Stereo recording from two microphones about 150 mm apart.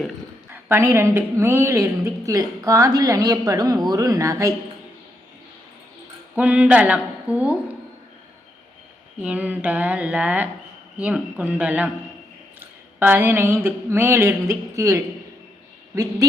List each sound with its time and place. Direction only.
0.5 s a woman's voice: 15° right (ahead or behind)
6.3 s speech: 10° right (ahead or behind)
9.2 s speech: 10° right (ahead or behind)